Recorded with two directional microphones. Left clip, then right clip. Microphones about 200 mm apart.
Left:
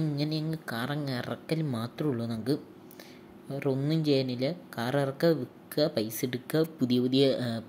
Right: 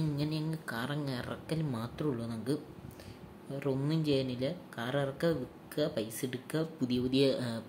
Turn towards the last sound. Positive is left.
turn(degrees=15)  # may be behind; listen again after turning